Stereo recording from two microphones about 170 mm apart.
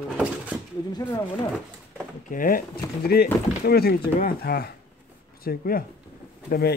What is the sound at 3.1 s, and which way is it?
Speech, 65° left (ahead or behind).